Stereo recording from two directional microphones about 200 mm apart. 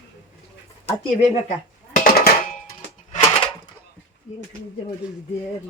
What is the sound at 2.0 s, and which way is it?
Music, 50° left (ahead or behind).